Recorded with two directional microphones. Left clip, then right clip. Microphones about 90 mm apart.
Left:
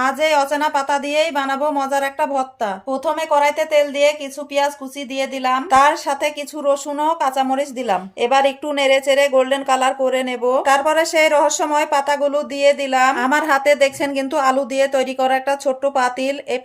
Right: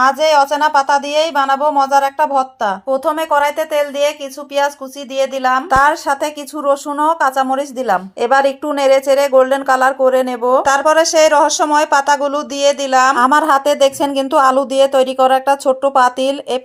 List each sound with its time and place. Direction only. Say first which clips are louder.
0.0 s a woman's voice: right 5 dB; 20° right (ahead or behind)
5.1 s a woman's voice: right 5 dB; 25° right (ahead or behind)
13.1 s speech: right 5 dB; 40° right (ahead or behind)